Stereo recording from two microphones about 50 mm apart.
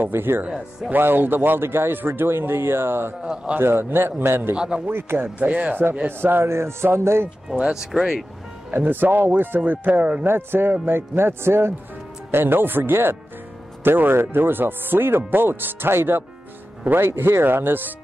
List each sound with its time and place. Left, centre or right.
0.0 s speech: right
4.6 s speech: centre
4.8 s speech: right
5.4 s speech: right
6.0 s speech: right
6.5 s music: right
7.6 s speech: centre
8.7 s speech: right
9.7 s speech: right
10.2 s speech: right